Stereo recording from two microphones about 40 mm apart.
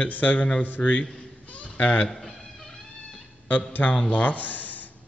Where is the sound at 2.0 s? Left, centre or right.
Centre.